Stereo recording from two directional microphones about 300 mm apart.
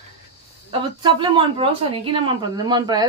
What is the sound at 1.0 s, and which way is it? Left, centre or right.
Speech, centre.